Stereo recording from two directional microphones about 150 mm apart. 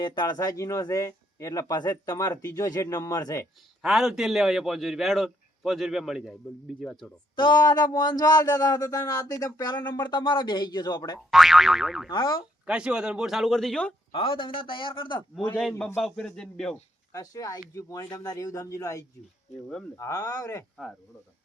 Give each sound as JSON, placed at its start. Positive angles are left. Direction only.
{"t": 0.0, "sound": "speech", "side_deg": 30}
{"t": 3.8, "sound": "a man's voice", "side_deg": 0}
{"t": 7.3, "sound": "speech", "side_deg": 30}
{"t": 11.3, "sound": "a man's voice", "side_deg": 0}
{"t": 12.1, "sound": "a man's voice", "side_deg": 30}
{"t": 12.6, "sound": "a man's voice", "side_deg": -5}
{"t": 14.1, "sound": "a man's voice", "side_deg": 35}
{"t": 16.0, "sound": "a man's voice", "side_deg": 5}
{"t": 17.1, "sound": "speech", "side_deg": 20}